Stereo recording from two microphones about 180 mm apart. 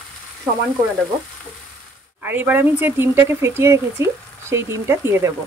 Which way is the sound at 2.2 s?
10° right (ahead or behind).